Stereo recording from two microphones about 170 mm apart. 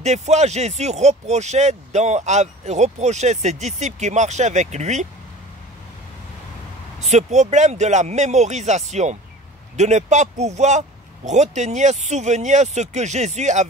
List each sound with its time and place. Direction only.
0.0 s speech: 40° right (ahead or behind)
7.0 s speech: 40° right (ahead or behind)